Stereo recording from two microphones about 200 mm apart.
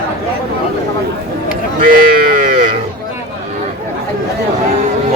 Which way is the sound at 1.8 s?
45° right (ahead or behind).